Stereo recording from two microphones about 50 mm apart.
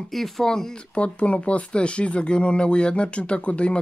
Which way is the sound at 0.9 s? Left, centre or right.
Left.